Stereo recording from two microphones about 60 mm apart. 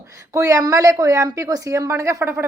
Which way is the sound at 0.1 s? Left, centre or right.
Right.